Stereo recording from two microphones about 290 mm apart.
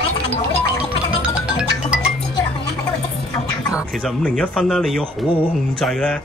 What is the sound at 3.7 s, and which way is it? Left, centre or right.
Speech, centre.